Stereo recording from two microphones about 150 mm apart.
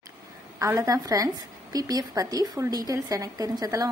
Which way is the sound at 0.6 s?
20° right (ahead or behind).